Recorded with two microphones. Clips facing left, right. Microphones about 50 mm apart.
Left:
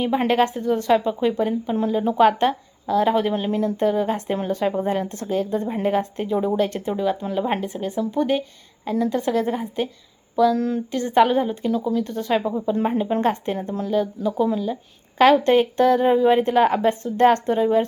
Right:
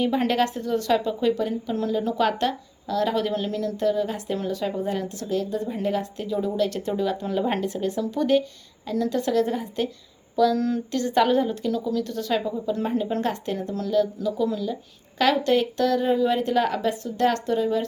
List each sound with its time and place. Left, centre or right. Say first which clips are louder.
0.0 s speech: left 3 dB; centre; by 6.7 s left
6.7 s speech: left 2 dB; centre
10.9 s speech: left 3 dB; left